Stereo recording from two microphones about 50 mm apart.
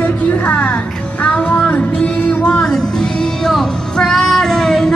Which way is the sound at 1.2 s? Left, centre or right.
Left.